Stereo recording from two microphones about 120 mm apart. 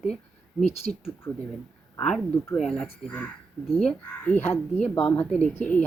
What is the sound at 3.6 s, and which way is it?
Speech, centre (ahead or behind).